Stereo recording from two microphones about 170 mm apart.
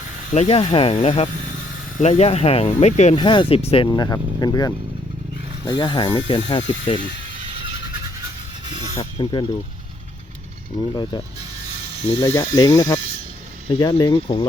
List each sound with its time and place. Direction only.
0.3 s speech: 35° left (ahead or behind)
3.2 s speech: 30° left (ahead or behind)
3.9 s speech: 25° left (ahead or behind)
9.0 s speech: 20° left (ahead or behind)
10.8 s speech: 25° left (ahead or behind)
12.2 s speech: 15° left (ahead or behind)